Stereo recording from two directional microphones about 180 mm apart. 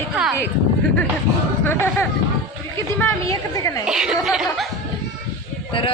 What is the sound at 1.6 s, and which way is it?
A woman's voice, 10° left (ahead or behind).